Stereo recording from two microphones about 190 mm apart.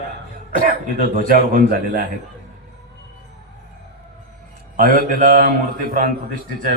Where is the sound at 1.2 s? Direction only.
50° right (ahead or behind).